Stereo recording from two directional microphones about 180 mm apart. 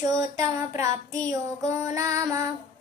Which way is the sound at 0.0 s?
20° right (ahead or behind).